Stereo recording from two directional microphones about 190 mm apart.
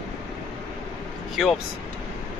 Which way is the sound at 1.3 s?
Centre (ahead or behind).